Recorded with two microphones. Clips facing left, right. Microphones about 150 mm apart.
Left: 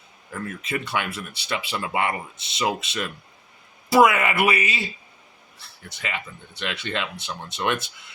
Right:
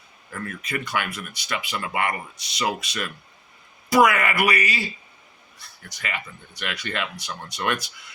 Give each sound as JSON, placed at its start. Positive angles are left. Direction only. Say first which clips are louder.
{"t": 0.3, "sound": "speech", "louder": "left 2 dB", "side_deg": 25}